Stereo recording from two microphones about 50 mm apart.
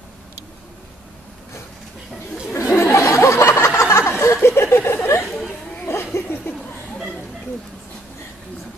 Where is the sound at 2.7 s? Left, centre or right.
Left.